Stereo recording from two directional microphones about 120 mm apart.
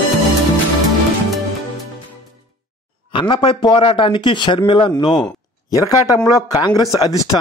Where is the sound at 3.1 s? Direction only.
45° left (ahead or behind).